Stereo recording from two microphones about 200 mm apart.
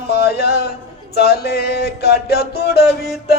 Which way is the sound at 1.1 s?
55° left (ahead or behind).